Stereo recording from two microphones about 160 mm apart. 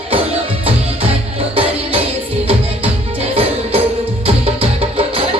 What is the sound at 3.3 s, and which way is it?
Music, 35° right (ahead or behind).